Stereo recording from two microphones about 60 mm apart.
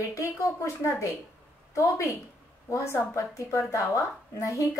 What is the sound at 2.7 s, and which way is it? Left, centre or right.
A woman's voice, left.